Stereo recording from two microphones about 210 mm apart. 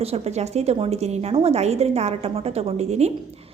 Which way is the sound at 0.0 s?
30° right (ahead or behind).